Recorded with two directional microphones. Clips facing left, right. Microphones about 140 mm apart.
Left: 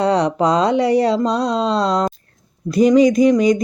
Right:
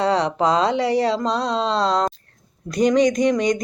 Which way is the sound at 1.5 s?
10° left (ahead or behind).